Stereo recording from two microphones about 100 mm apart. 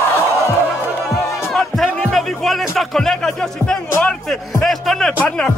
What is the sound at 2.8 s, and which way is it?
Speech, 5° left (ahead or behind).